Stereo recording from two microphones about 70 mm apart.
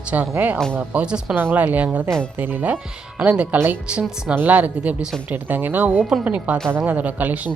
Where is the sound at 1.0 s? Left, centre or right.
Centre.